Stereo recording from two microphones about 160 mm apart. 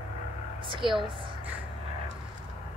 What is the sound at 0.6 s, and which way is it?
Speech, 30° right (ahead or behind).